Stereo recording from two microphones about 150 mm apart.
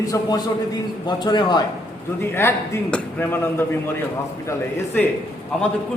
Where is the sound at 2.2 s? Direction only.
15° left (ahead or behind).